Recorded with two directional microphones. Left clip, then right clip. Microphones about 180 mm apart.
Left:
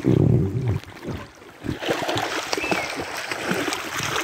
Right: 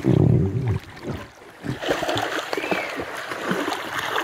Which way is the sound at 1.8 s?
45° right (ahead or behind).